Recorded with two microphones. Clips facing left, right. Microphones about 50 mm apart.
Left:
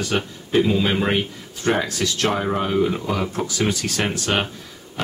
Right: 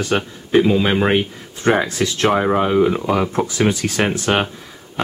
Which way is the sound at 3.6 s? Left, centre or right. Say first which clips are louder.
Right 4 dB; centre.